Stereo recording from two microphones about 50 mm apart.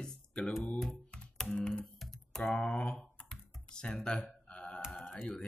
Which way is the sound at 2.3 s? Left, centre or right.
Centre.